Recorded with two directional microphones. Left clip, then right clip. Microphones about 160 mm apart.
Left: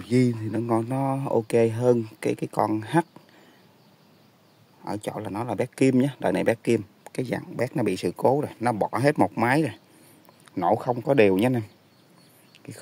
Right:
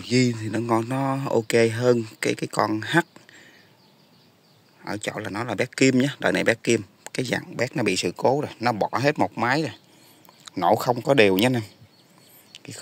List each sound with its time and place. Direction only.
0.0 s speech: 10° left (ahead or behind)
4.8 s speech: 10° left (ahead or behind)
9.3 s speech: 30° left (ahead or behind)
10.4 s a sound: 15° left (ahead or behind)
10.7 s speech: centre (ahead or behind)
12.5 s whispering: 10° left (ahead or behind)